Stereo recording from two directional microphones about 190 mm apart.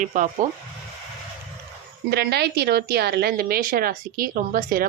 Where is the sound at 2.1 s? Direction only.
60° right (ahead or behind).